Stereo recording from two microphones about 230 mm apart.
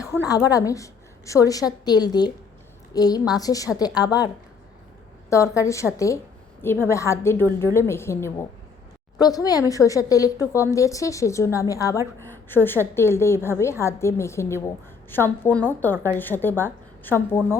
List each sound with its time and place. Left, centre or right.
0.0 s a sound: centre
0.3 s speech: centre
5.3 s speech: centre